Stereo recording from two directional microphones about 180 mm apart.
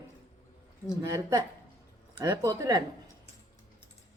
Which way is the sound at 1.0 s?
15° right (ahead or behind).